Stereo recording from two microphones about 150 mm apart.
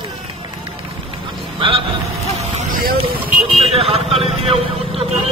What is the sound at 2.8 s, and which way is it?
Vehicle, 80° right.